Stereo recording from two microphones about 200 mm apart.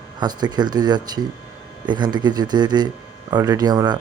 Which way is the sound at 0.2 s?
20° right (ahead or behind).